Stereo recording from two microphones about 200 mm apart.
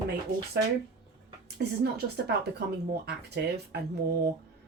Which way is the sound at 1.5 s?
55° right (ahead or behind).